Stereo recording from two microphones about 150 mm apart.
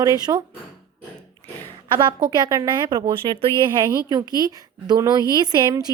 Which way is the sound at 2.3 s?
25° right (ahead or behind).